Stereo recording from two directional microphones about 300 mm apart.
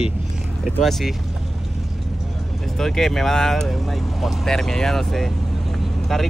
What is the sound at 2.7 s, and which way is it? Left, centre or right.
Speech, centre.